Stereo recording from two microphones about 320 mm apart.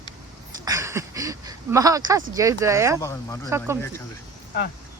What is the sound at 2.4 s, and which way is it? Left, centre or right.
Speech, centre.